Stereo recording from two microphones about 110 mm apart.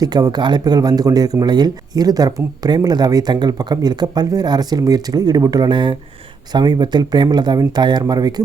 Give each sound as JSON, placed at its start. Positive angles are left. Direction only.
{"t": 0.0, "sound": "speech", "side_deg": -40}